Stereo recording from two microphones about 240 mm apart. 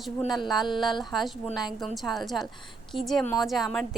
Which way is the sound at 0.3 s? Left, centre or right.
Centre.